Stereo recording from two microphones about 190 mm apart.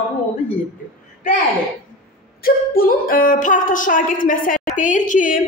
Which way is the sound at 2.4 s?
50° left (ahead or behind).